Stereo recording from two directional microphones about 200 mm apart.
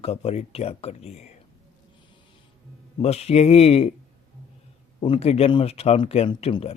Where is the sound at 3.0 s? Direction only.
30° left (ahead or behind).